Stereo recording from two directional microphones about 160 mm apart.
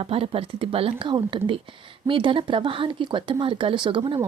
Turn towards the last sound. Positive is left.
turn(degrees=-30)  # may be behind; listen again after turning